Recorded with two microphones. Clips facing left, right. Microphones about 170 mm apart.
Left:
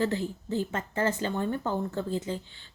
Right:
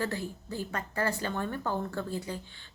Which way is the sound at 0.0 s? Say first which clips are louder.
Left 5 dB; 20° left (ahead or behind).